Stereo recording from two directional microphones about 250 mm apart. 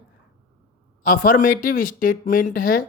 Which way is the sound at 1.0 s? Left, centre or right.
Left.